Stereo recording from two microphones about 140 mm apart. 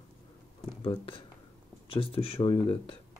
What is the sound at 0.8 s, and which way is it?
Speech, 40° left (ahead or behind).